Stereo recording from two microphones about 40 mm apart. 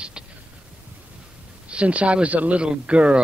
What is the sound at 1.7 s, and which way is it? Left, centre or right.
Speech, right.